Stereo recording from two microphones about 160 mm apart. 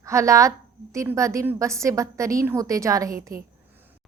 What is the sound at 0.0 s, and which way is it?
A woman's voice, 20° right (ahead or behind).